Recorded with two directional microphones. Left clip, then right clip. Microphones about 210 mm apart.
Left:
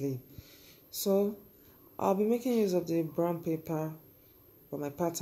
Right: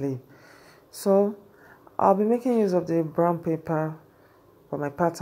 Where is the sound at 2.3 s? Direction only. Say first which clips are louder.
Right 7 dB; centre (ahead or behind).